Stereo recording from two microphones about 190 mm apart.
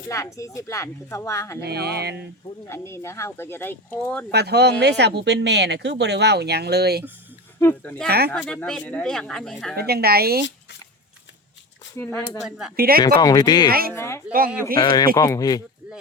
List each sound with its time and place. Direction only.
0.1 s speech: 15° left (ahead or behind)
1.6 s speech: 60° right (ahead or behind)
2.6 s speech: 15° left (ahead or behind)
4.3 s speech: 60° right (ahead or behind)
7.6 s speech: 10° left (ahead or behind)
8.0 s speech: 55° right (ahead or behind)
8.4 s speech: 5° left (ahead or behind)
9.7 s speech: 55° right (ahead or behind)
11.9 s speech: 10° left (ahead or behind)
12.5 s speech: centre (ahead or behind)
12.7 s speech: 50° right (ahead or behind)
13.1 s speech: 20° left (ahead or behind)
13.7 s speech: 50° right (ahead or behind)
13.9 s speech: 15° left (ahead or behind)